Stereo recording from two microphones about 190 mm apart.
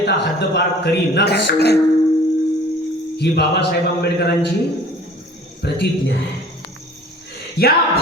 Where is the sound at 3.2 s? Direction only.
60° left (ahead or behind).